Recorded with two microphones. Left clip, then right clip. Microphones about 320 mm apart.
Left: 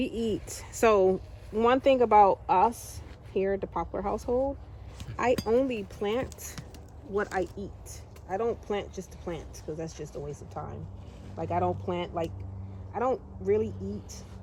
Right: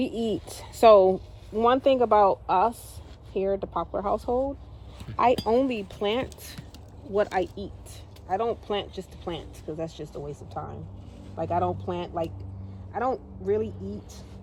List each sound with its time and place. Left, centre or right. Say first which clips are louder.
0.1 s a woman's voice: right 2 dB; right
0.3 s speech: right 3 dB; centre